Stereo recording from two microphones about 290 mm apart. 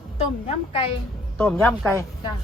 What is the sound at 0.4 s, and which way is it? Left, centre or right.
Speech, centre.